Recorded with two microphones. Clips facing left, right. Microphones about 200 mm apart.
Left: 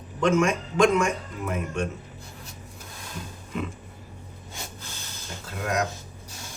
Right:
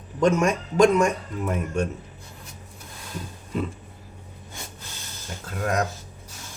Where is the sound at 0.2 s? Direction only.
40° right (ahead or behind).